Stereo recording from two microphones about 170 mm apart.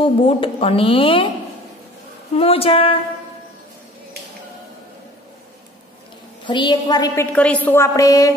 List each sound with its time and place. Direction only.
0.0 s speech: 30° left (ahead or behind)
2.3 s speech: 35° left (ahead or behind)
6.4 s a woman's voice: 25° left (ahead or behind)
7.3 s a woman's voice: 10° left (ahead or behind)